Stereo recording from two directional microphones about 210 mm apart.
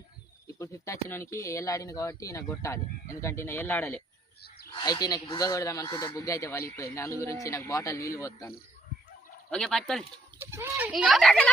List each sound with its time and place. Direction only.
0.4 s speech: 15° left (ahead or behind)
4.4 s bird: 50° left (ahead or behind)
4.8 s speech: 20° left (ahead or behind)
9.5 s speech: 5° left (ahead or behind)
10.3 s speech: 10° right (ahead or behind)